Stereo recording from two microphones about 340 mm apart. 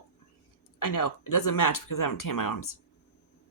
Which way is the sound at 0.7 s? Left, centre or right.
Left.